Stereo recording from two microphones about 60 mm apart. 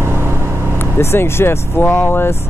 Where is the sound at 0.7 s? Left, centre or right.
Left.